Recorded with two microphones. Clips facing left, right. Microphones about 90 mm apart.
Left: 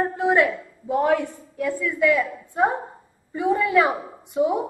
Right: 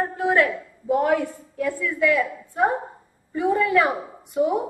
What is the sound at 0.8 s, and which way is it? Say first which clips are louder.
Speech: even; centre (ahead or behind).